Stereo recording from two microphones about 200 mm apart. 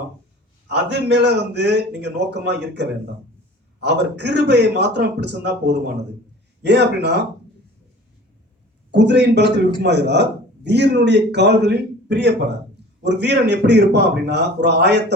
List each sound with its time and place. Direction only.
0.7 s a man's voice: 55° right (ahead or behind)
8.9 s a man's voice: 60° right (ahead or behind)